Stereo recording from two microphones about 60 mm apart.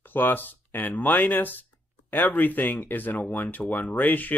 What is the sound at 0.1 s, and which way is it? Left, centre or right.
Speech, left.